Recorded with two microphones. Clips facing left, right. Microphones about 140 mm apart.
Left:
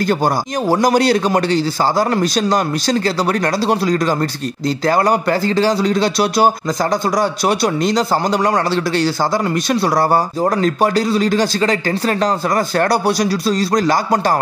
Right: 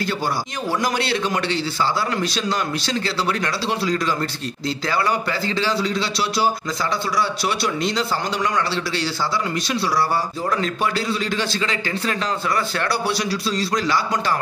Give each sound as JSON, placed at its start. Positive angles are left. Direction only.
{"t": 0.0, "sound": "a man's voice", "side_deg": 45}